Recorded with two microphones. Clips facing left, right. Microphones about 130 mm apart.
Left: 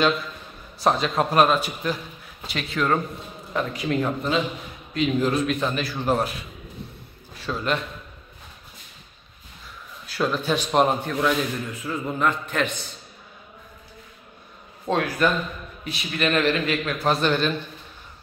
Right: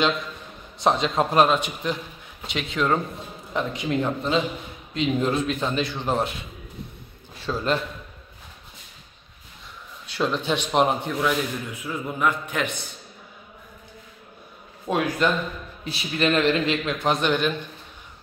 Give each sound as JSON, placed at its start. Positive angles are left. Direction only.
{"t": 0.7, "sound": "a man's voice", "side_deg": -25}
{"t": 7.5, "sound": "a man's voice", "side_deg": -20}
{"t": 10.1, "sound": "speech", "side_deg": 5}
{"t": 10.7, "sound": "speech", "side_deg": -15}
{"t": 14.9, "sound": "speech", "side_deg": -15}
{"t": 15.8, "sound": "a man's voice", "side_deg": -30}